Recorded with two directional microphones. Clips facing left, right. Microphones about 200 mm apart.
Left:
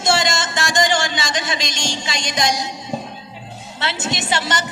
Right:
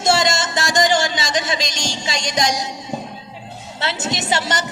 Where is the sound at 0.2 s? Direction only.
40° right (ahead or behind).